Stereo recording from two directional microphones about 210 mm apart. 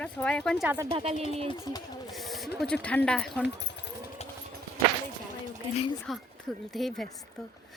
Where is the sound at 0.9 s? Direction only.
30° right (ahead or behind).